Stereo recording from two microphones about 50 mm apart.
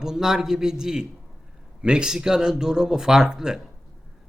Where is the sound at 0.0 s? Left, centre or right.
Centre.